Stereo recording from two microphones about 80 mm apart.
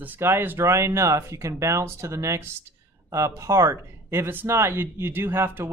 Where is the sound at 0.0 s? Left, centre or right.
Right.